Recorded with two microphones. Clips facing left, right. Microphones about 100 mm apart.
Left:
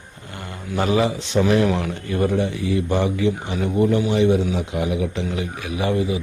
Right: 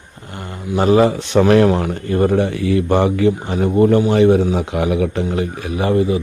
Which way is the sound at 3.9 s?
55° right (ahead or behind).